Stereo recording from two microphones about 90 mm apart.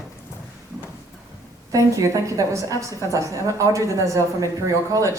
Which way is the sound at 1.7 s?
35° right (ahead or behind).